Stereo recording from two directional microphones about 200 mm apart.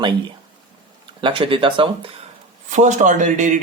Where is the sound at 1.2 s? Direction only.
25° right (ahead or behind).